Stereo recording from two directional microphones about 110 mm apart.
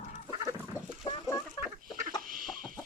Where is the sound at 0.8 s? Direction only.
25° left (ahead or behind).